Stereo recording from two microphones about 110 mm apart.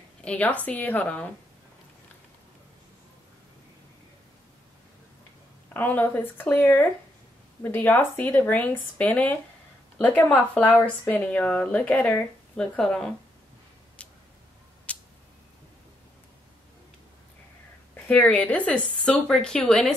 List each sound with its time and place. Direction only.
0.2 s a woman's voice: 10° left (ahead or behind)
5.7 s a woman's voice: 15° left (ahead or behind)
14.9 s a sound: 15° left (ahead or behind)
18.0 s a woman's voice: 15° left (ahead or behind)